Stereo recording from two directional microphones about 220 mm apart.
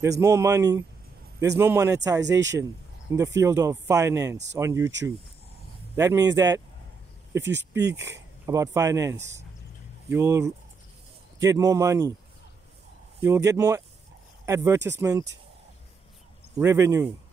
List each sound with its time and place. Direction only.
0.0 s speech: 15° right (ahead or behind)
5.9 s speech: 15° right (ahead or behind)
7.4 s speech: 50° right (ahead or behind)
8.0 s speech: 10° right (ahead or behind)
13.2 s speech: 15° right (ahead or behind)
16.5 s speech: 10° right (ahead or behind)